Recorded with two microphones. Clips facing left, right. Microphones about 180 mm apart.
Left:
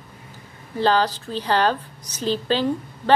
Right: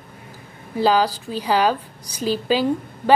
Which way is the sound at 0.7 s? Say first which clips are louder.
Right 2 dB; 10° right (ahead or behind).